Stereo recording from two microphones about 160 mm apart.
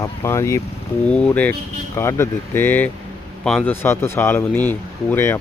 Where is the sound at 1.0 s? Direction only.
5° left (ahead or behind).